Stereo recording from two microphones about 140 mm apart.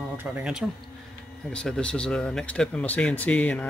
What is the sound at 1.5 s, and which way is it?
Speech, 5° left (ahead or behind).